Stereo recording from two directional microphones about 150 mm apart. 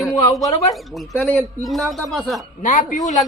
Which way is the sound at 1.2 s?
10° left (ahead or behind).